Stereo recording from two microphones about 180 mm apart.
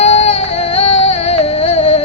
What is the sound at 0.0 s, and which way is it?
Music, 35° left (ahead or behind).